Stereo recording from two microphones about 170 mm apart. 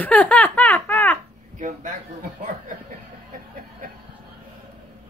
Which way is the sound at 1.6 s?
50° right (ahead or behind).